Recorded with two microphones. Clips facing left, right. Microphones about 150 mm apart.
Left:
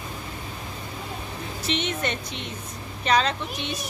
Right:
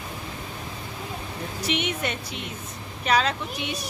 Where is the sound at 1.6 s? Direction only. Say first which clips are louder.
Even; 10° right (ahead or behind).